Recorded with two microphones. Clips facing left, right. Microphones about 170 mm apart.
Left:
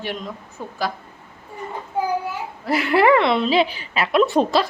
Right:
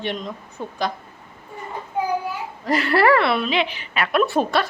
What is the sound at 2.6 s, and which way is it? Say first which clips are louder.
Speech: left 1 dB; 10° left (ahead or behind).